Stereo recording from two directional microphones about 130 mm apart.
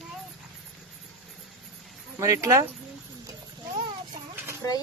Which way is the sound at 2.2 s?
25° right (ahead or behind).